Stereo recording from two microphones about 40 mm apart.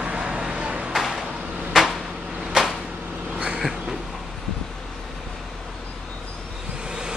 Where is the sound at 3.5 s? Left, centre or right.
Centre.